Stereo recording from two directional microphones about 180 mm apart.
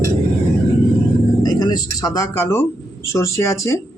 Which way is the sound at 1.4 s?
25° left (ahead or behind).